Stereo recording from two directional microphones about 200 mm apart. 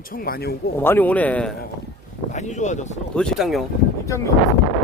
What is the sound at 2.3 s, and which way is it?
Speech, 35° left (ahead or behind).